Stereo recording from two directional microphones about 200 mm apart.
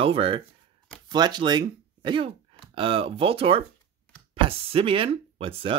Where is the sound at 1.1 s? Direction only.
20° right (ahead or behind).